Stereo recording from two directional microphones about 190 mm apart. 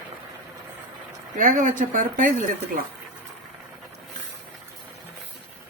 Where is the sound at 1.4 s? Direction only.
45° right (ahead or behind).